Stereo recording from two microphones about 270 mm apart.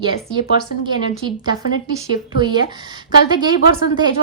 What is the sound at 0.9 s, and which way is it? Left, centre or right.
Speech, centre.